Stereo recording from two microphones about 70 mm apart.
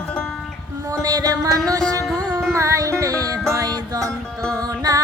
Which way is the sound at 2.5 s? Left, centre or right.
Right.